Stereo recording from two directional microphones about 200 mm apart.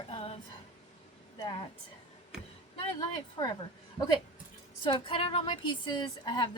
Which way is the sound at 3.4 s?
25° left (ahead or behind).